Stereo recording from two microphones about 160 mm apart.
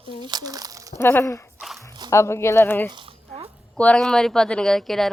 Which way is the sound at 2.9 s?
35° right (ahead or behind).